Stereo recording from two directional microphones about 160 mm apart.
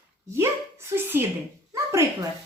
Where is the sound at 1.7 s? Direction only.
20° right (ahead or behind).